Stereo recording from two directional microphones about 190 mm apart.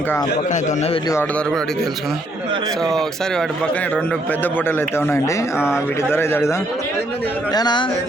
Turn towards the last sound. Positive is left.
turn(degrees=25)  # may be behind; listen again after turning